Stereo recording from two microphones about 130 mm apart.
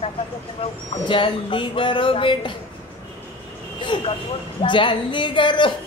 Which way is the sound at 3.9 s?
40° left (ahead or behind).